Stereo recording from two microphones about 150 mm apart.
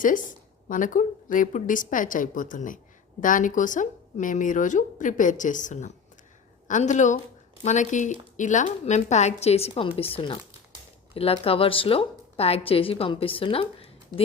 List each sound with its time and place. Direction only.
0.0 s a woman's voice: 60° left (ahead or behind); by 13.9 s 40° left (ahead or behind)